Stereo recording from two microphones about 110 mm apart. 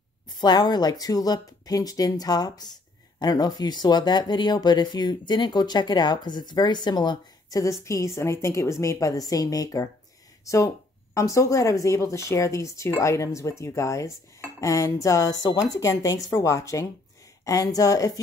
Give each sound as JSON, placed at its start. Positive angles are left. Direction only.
{"t": 0.3, "sound": "speech", "side_deg": 40}